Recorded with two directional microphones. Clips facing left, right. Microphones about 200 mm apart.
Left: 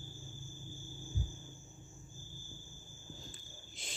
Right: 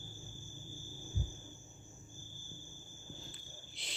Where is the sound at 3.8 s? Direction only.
45° left (ahead or behind).